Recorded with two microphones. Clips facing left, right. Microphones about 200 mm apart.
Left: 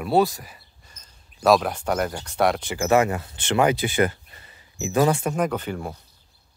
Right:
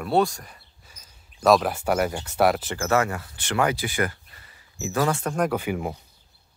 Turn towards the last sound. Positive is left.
turn(degrees=-15)  # may be behind; listen again after turning